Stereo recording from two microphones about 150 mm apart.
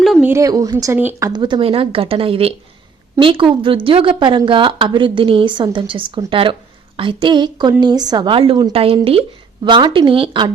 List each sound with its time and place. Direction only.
0.0 s a sound: centre (ahead or behind)
0.3 s speech: 20° right (ahead or behind)
1.3 s a woman's voice: 30° right (ahead or behind)